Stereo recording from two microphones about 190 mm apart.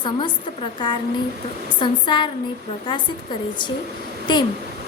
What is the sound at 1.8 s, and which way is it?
Speech, 25° left (ahead or behind).